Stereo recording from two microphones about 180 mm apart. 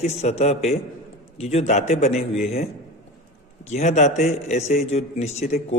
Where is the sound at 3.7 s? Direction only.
40° left (ahead or behind).